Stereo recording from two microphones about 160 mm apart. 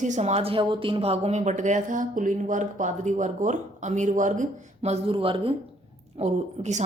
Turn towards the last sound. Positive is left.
turn(degrees=-45)  # may be behind; listen again after turning